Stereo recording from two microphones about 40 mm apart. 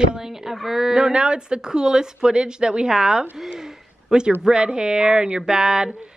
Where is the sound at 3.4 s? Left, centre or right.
Centre.